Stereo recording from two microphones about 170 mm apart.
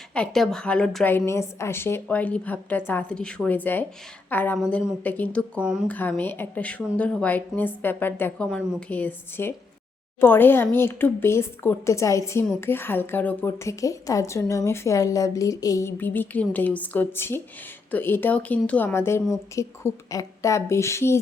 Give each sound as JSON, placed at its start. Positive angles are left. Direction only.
{"t": 0.1, "sound": "a woman's voice", "side_deg": 5}
{"t": 5.5, "sound": "a woman's voice", "side_deg": -5}
{"t": 5.9, "sound": "a woman's voice", "side_deg": 10}